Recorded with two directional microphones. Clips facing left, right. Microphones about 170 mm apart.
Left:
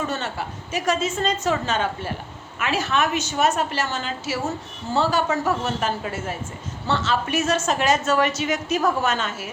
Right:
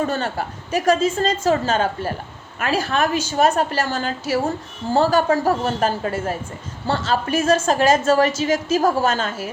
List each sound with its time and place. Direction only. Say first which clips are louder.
0.1 s a woman's voice: right 4 dB; 40° right (ahead or behind)